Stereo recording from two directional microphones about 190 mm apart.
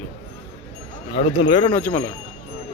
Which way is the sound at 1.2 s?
35° left (ahead or behind).